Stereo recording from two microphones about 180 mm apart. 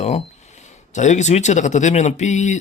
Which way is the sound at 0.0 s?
40° left (ahead or behind).